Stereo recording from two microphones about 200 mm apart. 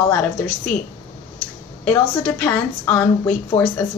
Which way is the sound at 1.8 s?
10° left (ahead or behind).